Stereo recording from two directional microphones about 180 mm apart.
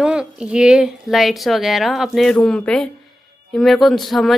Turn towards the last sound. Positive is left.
turn(degrees=0)  # may be behind; listen again after turning